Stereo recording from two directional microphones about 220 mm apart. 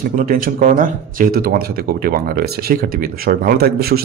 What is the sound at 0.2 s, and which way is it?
Speech, 40° right (ahead or behind).